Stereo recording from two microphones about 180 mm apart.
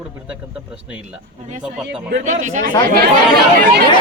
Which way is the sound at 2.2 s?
45° right (ahead or behind).